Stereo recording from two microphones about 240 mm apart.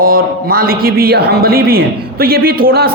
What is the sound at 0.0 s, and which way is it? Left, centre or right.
Speech, right.